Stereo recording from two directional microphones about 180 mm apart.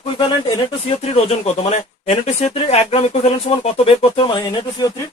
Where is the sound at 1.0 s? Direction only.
35° left (ahead or behind).